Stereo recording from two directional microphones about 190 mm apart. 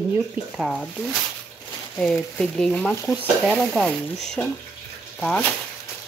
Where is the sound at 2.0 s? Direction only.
5° left (ahead or behind).